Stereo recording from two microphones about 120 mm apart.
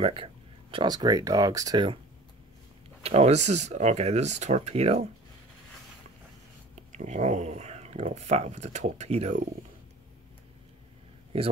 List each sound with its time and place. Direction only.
0.0 s a sound: 50° right (ahead or behind)
0.9 s speech: 30° right (ahead or behind)
3.0 s speech: 60° right (ahead or behind)
6.7 s speech: 90° right; by 9.4 s 70° right (ahead or behind)
11.3 s speech: 55° right (ahead or behind)